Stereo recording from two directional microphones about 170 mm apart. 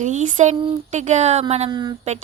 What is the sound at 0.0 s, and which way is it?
A woman's voice, 45° right (ahead or behind).